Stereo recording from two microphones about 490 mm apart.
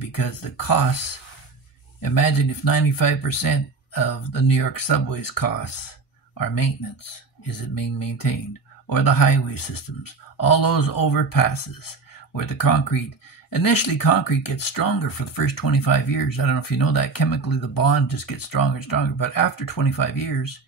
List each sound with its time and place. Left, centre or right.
0.1 s speech: left